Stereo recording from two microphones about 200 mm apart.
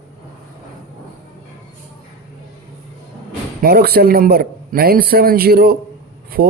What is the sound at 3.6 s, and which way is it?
A man's voice, 50° right (ahead or behind).